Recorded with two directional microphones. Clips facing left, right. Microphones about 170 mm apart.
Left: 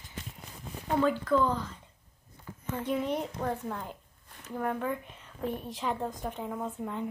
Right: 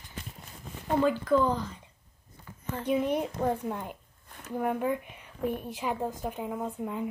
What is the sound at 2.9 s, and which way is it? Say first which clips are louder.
A child's voice: right 4 dB; 20° right (ahead or behind).